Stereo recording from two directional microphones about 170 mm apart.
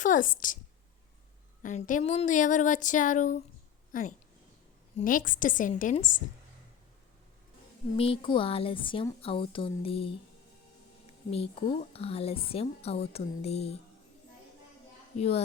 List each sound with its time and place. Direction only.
0.0 s speech: 50° left (ahead or behind)
1.6 s speech: 45° left (ahead or behind)
4.9 s speech: 55° left (ahead or behind)
7.9 s speech: 35° left (ahead or behind)
11.3 s speech: 35° left (ahead or behind)
15.2 s speech: 35° left (ahead or behind)